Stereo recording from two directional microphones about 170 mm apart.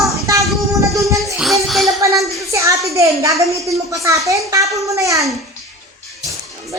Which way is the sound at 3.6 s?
20° right (ahead or behind).